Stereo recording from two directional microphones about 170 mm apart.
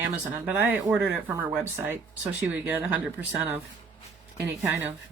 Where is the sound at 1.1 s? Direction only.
10° right (ahead or behind).